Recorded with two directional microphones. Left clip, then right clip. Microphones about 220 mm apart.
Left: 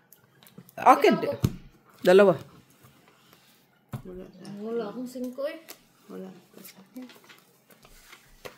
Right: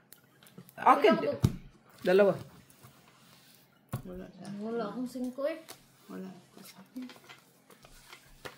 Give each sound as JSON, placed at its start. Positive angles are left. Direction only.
{"t": 0.7, "sound": "speech", "side_deg": 55}
{"t": 4.7, "sound": "a woman's voice", "side_deg": 30}